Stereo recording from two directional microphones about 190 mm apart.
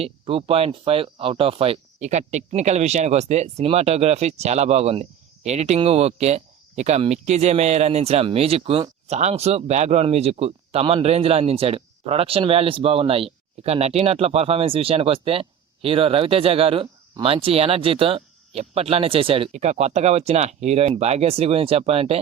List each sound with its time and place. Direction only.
0.0 s speech: 30° right (ahead or behind)